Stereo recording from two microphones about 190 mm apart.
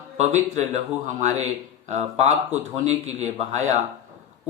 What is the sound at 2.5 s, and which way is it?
Speech, 35° right (ahead or behind).